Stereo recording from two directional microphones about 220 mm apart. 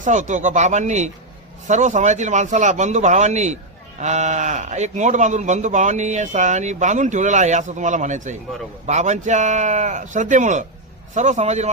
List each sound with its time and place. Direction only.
0.0 s speech: 35° right (ahead or behind)